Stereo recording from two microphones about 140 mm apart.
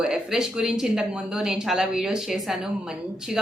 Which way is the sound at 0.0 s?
5° right (ahead or behind).